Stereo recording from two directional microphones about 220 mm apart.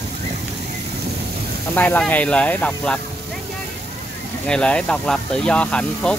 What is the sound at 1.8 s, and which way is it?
Speech, 5° left (ahead or behind).